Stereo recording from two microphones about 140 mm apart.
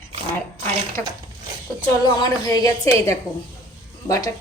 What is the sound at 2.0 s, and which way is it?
A woman's voice, 30° left (ahead or behind).